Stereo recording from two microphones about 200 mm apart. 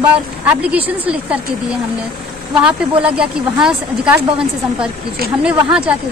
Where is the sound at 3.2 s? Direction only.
5° right (ahead or behind).